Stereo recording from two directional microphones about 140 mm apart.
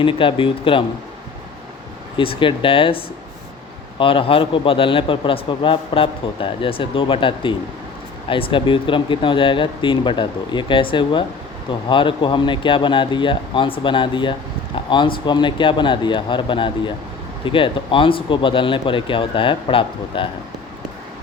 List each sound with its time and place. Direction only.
0.0 s a man's voice: 40° left (ahead or behind)
2.1 s a man's voice: 40° left (ahead or behind)